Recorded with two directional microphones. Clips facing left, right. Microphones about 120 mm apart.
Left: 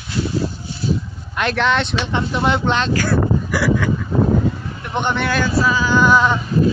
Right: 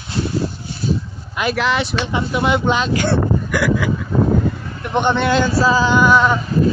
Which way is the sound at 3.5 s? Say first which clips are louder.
Right 2 dB; 5° left (ahead or behind).